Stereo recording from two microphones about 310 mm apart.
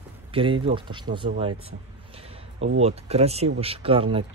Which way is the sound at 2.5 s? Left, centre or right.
Right.